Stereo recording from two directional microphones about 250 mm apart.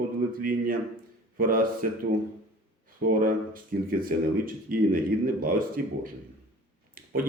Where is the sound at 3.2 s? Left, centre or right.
Right.